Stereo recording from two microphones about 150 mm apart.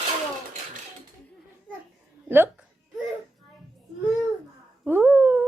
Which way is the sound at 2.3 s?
15° right (ahead or behind).